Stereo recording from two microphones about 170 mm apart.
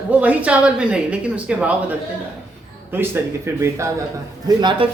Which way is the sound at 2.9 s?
15° right (ahead or behind).